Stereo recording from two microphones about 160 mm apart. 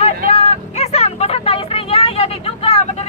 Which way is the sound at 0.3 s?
40° left (ahead or behind).